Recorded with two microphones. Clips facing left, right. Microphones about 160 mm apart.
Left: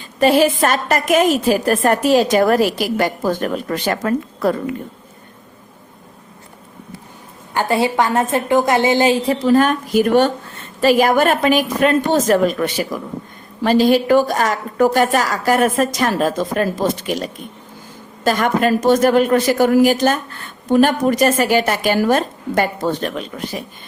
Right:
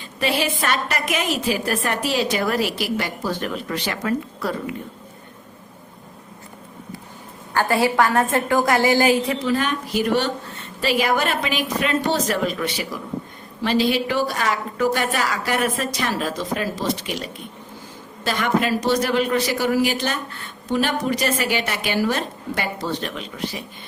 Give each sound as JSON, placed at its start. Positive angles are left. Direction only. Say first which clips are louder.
{"t": 0.2, "sound": "a woman's voice", "louder": "left 10 dB", "side_deg": 45}
{"t": 7.5, "sound": "a woman's voice", "louder": "left 2 dB", "side_deg": 20}